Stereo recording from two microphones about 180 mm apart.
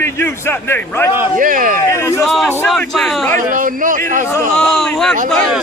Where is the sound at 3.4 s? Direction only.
45° right (ahead or behind).